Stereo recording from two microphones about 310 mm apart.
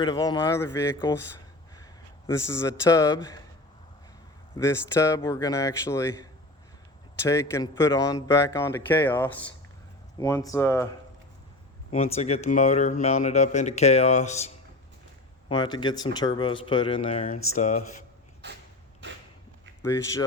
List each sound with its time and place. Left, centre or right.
0.0 s a man's voice: centre
4.5 s speech: centre
11.9 s speech: centre
18.4 s a sound: right
19.8 s speech: centre